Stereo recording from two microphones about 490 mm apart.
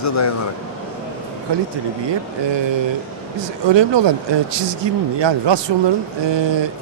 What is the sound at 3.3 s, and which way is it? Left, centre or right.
Speech, right.